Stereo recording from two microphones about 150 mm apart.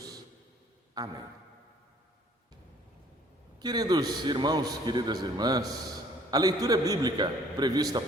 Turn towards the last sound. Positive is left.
turn(degrees=-25)  # may be behind; listen again after turning